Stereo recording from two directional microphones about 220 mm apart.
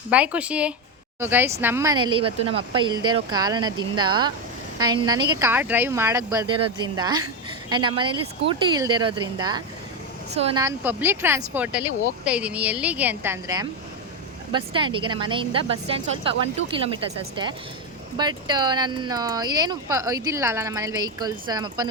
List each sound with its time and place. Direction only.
0.1 s speech: 5° right (ahead or behind); by 10.6 s 25° right (ahead or behind)
10.6 s speech: 15° right (ahead or behind)
18.2 s speech: 20° right (ahead or behind)